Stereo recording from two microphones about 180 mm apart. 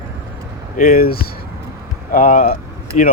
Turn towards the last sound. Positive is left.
turn(degrees=45)  # may be behind; listen again after turning